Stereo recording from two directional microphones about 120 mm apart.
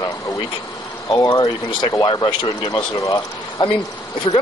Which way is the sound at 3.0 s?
25° left (ahead or behind).